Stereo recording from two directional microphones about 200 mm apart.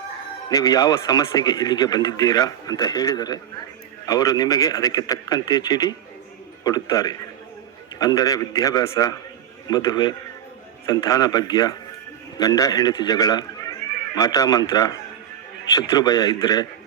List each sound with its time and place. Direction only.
0.5 s speech: 20° left (ahead or behind)